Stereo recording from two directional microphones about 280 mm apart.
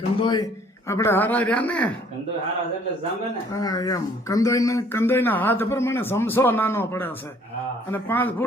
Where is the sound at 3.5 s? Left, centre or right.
Centre.